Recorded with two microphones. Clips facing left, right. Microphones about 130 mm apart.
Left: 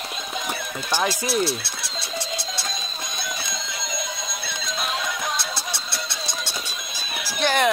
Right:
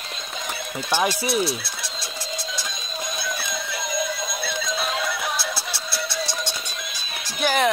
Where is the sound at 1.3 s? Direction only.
Centre (ahead or behind).